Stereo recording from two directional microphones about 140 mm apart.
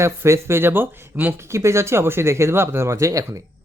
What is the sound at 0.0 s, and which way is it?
Speech, 20° right (ahead or behind).